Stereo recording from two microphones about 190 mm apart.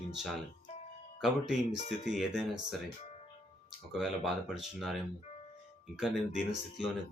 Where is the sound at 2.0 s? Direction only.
Centre (ahead or behind).